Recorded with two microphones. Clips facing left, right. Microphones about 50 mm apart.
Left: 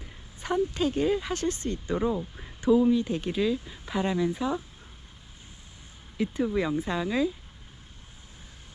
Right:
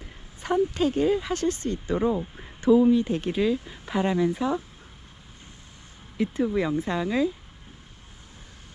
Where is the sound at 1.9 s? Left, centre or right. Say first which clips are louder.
Right 3 dB; right.